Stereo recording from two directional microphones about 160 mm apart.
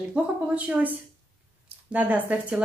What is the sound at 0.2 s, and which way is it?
Speech, 5° right (ahead or behind).